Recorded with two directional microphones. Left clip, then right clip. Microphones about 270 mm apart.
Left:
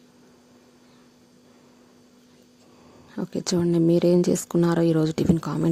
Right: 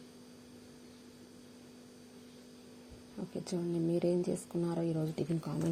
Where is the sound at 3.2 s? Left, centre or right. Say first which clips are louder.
Left 14 dB; left.